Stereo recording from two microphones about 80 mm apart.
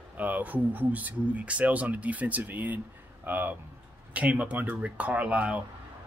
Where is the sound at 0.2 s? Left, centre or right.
Centre.